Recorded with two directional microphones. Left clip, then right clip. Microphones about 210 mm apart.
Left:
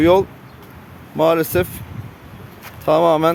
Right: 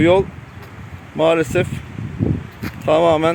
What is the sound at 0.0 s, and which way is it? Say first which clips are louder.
Speech: left 1 dB; 10° left (ahead or behind).